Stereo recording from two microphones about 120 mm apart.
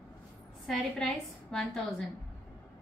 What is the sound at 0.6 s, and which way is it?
A woman's voice, 5° left (ahead or behind).